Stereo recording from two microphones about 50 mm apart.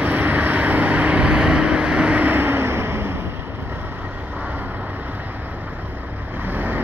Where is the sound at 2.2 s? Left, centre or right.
Right.